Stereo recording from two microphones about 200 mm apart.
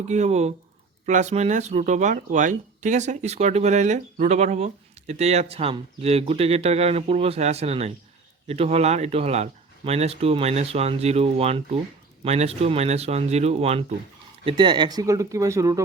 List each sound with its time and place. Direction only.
0.1 s speech: 35° right (ahead or behind); by 15.8 s 15° right (ahead or behind)